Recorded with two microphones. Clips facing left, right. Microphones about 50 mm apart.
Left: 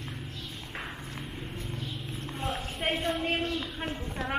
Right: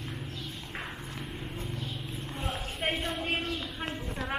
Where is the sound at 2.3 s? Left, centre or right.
Centre.